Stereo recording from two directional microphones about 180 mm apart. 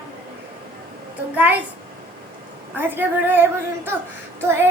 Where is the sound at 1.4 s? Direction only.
10° right (ahead or behind).